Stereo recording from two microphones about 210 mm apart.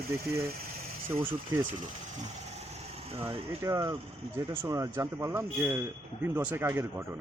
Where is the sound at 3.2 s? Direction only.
15° right (ahead or behind).